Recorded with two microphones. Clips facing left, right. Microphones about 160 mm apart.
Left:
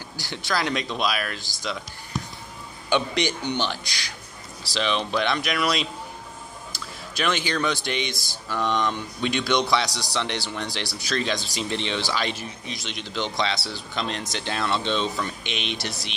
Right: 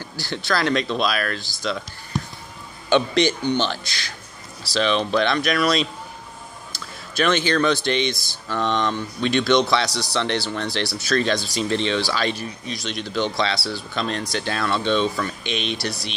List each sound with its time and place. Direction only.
0.2 s speech: 15° left (ahead or behind)
2.9 s speech: 15° left (ahead or behind)
5.1 s speech: 15° left (ahead or behind)